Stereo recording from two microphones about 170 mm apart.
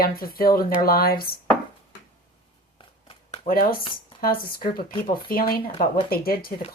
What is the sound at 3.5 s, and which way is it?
Speech, 60° left (ahead or behind).